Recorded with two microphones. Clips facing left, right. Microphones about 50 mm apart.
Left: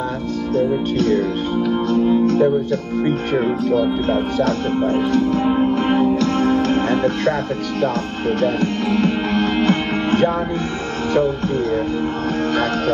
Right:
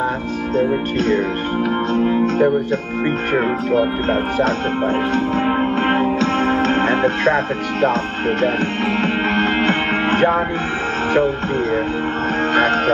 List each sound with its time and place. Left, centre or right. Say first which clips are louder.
2.0 s music: left 1 dB; right
3.3 s speech: right 1 dB; right
4.8 s music: left 2 dB; right
12.5 s speech: right 6 dB; right